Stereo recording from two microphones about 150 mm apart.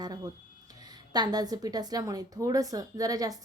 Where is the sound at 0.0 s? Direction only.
30° right (ahead or behind).